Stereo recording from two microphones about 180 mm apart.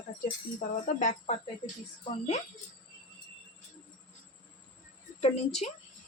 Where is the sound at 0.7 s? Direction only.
45° left (ahead or behind).